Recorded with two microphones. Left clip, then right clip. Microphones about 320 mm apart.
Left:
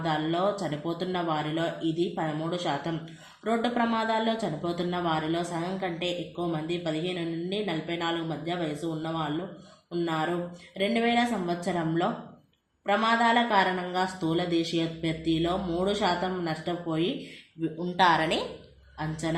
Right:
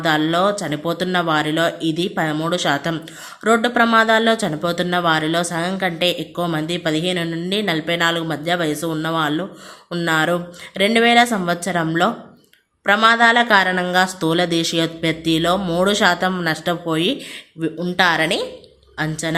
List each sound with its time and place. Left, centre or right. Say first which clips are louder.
0.0 s speech: right 10 dB; right